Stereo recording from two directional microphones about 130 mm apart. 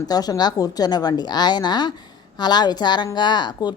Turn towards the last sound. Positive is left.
turn(degrees=35)  # may be behind; listen again after turning